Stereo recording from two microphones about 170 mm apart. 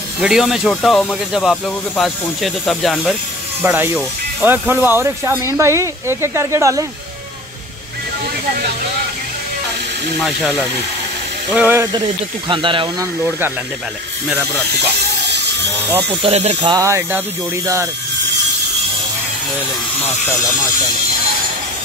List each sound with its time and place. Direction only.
0.2 s speech: 5° right (ahead or behind)
3.6 s speech: 10° right (ahead or behind)
10.2 s speech: centre (ahead or behind)
11.5 s speech: 10° right (ahead or behind)
12.4 s speech: 30° right (ahead or behind)
15.2 s a sound: 85° right
16.2 s speech: 40° right (ahead or behind)
16.6 s speech: 20° right (ahead or behind)